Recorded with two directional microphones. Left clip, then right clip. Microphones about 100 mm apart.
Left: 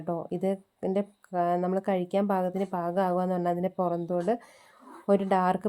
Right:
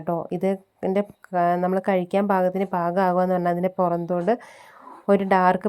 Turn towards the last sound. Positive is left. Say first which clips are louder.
# right 6 dB
turn(degrees=-35)  # may be behind; listen again after turning